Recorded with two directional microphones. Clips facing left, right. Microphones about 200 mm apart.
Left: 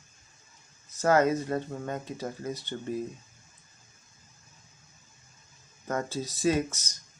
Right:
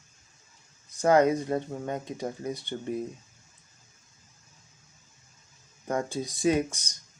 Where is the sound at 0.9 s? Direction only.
15° right (ahead or behind).